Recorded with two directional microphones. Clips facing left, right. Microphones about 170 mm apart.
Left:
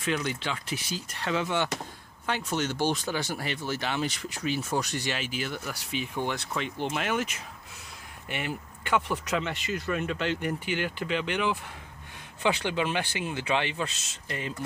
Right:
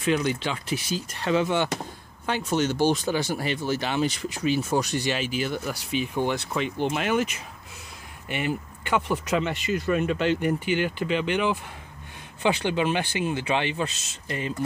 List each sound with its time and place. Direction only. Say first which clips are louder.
0.0 s speech: right 6 dB; 15° right (ahead or behind)
2.7 s speech: right 5 dB; 15° right (ahead or behind)
6.2 s speech: right 5 dB; 10° right (ahead or behind)
8.3 s speech: right 6 dB; 5° right (ahead or behind)